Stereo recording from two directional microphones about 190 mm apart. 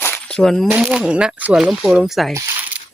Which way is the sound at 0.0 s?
5° left (ahead or behind).